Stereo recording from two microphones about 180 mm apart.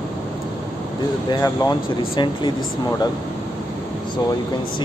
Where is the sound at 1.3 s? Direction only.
20° left (ahead or behind).